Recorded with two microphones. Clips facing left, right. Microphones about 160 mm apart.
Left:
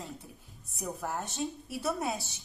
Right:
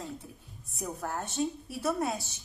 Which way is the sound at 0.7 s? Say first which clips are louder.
Even; centre (ahead or behind).